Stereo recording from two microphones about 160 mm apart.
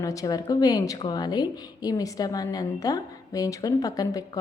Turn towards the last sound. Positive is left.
turn(degrees=25)  # may be behind; listen again after turning